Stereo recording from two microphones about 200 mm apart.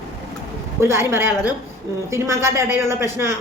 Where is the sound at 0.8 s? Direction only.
15° right (ahead or behind).